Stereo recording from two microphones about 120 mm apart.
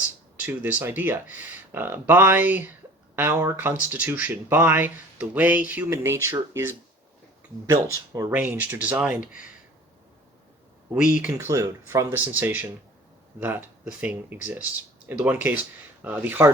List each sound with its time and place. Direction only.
0.3 s a sound: 15° right (ahead or behind)
0.8 s speech: 15° right (ahead or behind)
8.3 s speech: 15° right (ahead or behind)
10.9 s speech: 10° right (ahead or behind)